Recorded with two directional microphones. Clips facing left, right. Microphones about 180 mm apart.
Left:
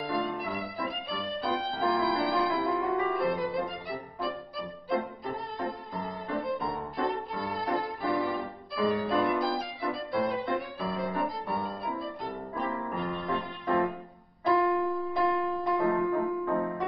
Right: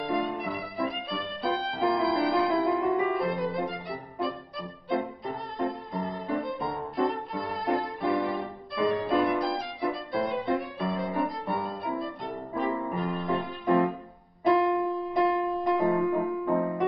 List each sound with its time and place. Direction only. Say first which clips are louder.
0.0 s music: right 2 dB; centre (ahead or behind)
2.5 s music: right 4 dB; 15° right (ahead or behind)
3.2 s music: right 1 dB; centre (ahead or behind)
9.4 s violin: right 2 dB; centre (ahead or behind)
12.6 s music: right 4 dB; centre (ahead or behind)
13.7 s music: right 4 dB; 15° right (ahead or behind)